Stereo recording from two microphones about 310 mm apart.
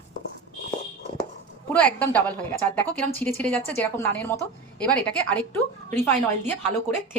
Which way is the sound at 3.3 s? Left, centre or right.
Centre.